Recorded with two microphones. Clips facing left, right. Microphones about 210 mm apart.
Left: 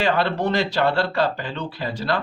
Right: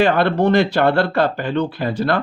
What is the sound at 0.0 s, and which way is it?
Speech, 55° right (ahead or behind).